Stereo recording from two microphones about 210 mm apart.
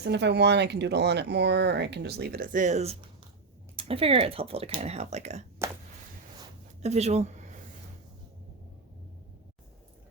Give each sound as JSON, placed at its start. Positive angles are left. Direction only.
{"t": 0.0, "sound": "speech", "side_deg": -55}
{"t": 5.6, "sound": "a sound", "side_deg": -10}
{"t": 6.8, "sound": "speech", "side_deg": -30}